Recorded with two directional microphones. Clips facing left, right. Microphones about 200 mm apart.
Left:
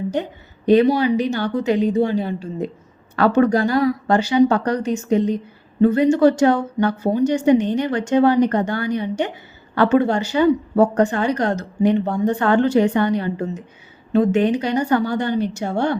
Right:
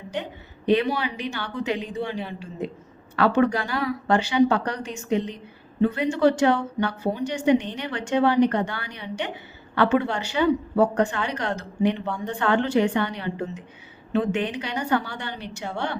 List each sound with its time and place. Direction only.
0.1 s a woman's voice: 40° left (ahead or behind)